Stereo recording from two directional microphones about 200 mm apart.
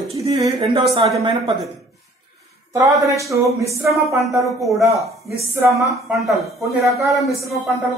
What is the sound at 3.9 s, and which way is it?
Speech, centre (ahead or behind).